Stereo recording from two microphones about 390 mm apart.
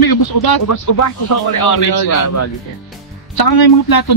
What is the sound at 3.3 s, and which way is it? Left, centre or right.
Speech, left.